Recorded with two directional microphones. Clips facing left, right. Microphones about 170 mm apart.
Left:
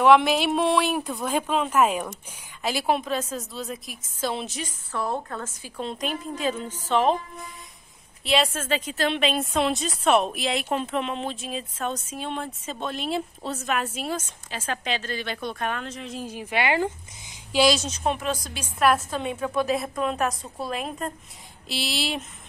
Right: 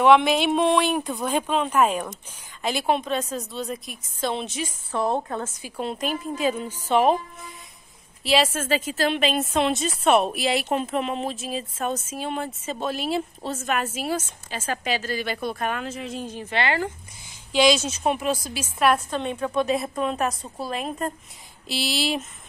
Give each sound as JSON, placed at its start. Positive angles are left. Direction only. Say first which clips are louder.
{"t": 0.0, "sound": "speech", "louder": "right 1 dB", "side_deg": 0}
{"t": 4.9, "sound": "a woman's voice", "louder": "right 4 dB", "side_deg": -20}
{"t": 5.8, "sound": "a woman's voice", "louder": "right 2 dB", "side_deg": -5}
{"t": 8.2, "sound": "speech", "louder": "right 2 dB", "side_deg": 0}